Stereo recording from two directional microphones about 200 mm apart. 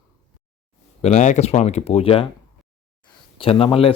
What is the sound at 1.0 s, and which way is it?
Speech, 35° left (ahead or behind).